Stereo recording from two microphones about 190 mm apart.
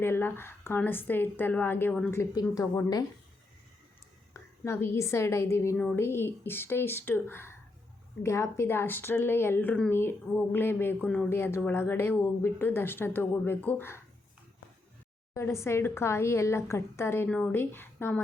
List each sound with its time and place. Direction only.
0.0 s speech: 10° left (ahead or behind)
4.4 s speech: 15° left (ahead or behind)
15.3 s speech: 15° left (ahead or behind)